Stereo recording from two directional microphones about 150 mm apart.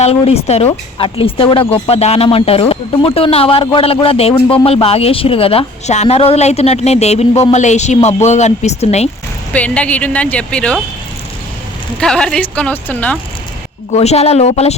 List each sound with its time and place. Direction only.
0.0 s speech: 45° left (ahead or behind)
9.5 s a woman's voice: 10° left (ahead or behind)
11.9 s a woman's voice: 5° left (ahead or behind)
13.9 s speech: 45° left (ahead or behind)